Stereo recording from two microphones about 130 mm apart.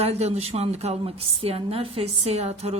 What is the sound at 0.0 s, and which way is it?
A woman's voice, 50° right (ahead or behind).